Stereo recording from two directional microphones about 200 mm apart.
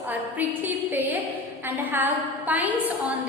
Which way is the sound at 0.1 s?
10° right (ahead or behind).